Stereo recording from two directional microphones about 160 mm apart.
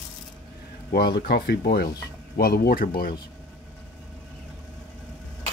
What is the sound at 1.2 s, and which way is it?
Speech, 90° left.